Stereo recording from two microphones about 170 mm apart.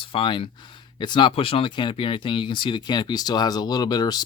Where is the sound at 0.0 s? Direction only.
30° left (ahead or behind).